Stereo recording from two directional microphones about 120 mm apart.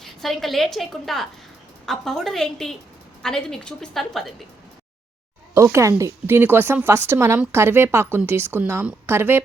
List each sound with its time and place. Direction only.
0.0 s a woman's voice: centre (ahead or behind)
5.5 s speech: 25° right (ahead or behind)